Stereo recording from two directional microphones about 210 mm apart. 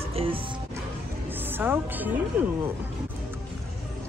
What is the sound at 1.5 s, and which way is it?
Speech, 10° right (ahead or behind).